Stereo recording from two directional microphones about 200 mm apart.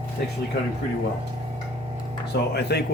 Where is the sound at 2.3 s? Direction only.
55° left (ahead or behind).